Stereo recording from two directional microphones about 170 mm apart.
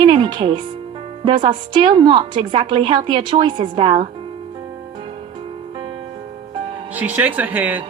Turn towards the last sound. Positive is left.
turn(degrees=-10)  # may be behind; listen again after turning